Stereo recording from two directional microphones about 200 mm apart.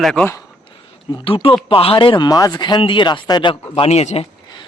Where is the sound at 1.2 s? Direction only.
25° left (ahead or behind).